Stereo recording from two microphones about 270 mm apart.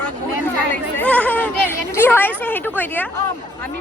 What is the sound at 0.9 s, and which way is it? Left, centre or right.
Speech, centre.